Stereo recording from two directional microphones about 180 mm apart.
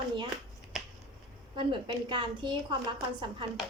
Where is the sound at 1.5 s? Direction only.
25° right (ahead or behind).